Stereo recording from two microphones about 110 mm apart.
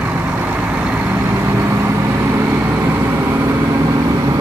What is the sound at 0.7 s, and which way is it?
Vehicle, 15° right (ahead or behind).